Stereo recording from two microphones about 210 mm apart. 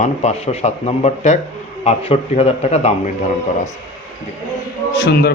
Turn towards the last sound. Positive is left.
turn(degrees=50)  # may be behind; listen again after turning